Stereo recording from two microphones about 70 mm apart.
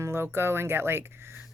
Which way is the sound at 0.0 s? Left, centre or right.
Right.